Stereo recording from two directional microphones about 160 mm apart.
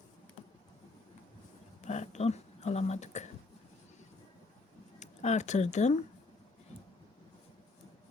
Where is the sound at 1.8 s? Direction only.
45° left (ahead or behind).